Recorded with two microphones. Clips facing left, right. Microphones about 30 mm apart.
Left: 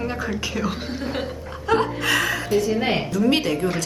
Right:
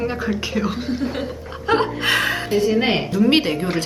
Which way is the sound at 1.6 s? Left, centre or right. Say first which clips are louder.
Right 2 dB; right.